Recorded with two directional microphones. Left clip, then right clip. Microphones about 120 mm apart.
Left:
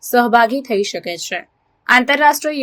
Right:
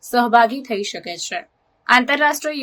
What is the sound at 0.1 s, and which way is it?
Speech, 25° left (ahead or behind).